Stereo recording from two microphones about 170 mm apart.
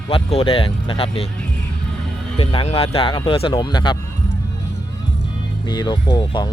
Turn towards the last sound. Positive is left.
turn(degrees=25)  # may be behind; listen again after turning